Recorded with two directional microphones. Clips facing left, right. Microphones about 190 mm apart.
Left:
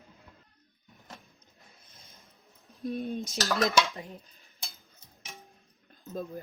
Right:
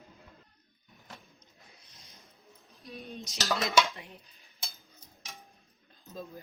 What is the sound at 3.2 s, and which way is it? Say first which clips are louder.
Dishes: left 2 dB; centre (ahead or behind).